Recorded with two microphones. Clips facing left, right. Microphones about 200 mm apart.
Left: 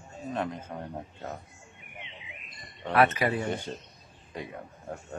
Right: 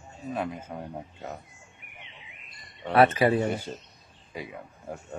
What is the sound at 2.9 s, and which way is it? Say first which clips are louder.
Speech: right 4 dB; 30° right (ahead or behind).